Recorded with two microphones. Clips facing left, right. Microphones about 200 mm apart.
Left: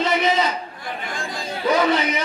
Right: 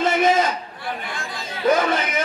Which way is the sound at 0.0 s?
50° right (ahead or behind).